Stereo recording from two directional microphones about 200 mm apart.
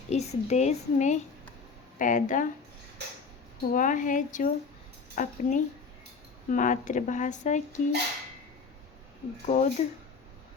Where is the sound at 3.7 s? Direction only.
40° left (ahead or behind).